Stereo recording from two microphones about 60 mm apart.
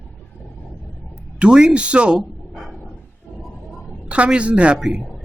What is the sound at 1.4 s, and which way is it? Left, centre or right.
Speech, centre.